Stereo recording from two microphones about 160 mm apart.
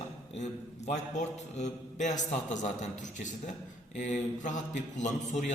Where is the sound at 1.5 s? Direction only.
50° left (ahead or behind).